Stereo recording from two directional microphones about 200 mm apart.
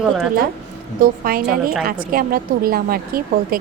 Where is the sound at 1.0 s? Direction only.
45° right (ahead or behind).